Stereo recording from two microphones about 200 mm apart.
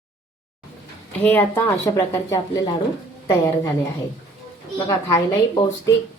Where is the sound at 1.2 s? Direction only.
10° left (ahead or behind).